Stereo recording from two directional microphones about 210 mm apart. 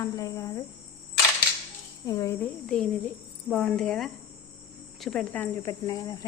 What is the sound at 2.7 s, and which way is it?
Speech, 5° left (ahead or behind).